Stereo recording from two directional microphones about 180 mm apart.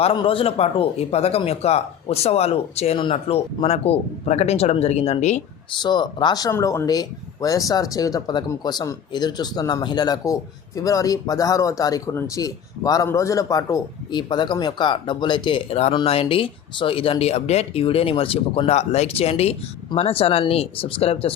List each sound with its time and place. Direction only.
0.0 s speech: 30° left (ahead or behind)
5.8 s speech: 25° left (ahead or behind)